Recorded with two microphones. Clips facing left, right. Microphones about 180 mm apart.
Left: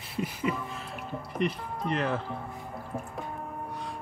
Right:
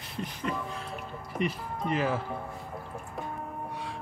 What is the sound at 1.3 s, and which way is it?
Speech, 5° right (ahead or behind).